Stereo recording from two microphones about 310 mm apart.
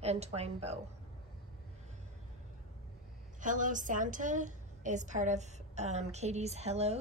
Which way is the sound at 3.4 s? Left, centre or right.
Right.